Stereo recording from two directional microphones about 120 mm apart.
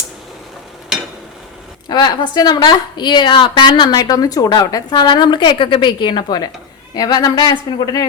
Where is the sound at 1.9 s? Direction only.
35° left (ahead or behind).